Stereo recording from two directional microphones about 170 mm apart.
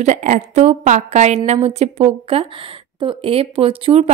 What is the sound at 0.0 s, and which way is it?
A woman's voice, 45° right (ahead or behind).